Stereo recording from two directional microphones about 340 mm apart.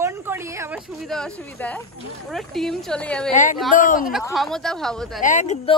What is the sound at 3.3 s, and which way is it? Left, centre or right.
Speech, left.